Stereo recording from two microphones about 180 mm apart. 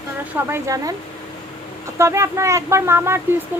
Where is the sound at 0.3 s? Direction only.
15° right (ahead or behind).